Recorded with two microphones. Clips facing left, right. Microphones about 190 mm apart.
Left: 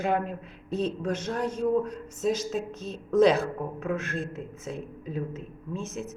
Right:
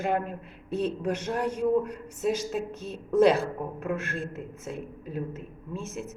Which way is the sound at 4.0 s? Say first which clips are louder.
Left 1 dB; 55° right (ahead or behind).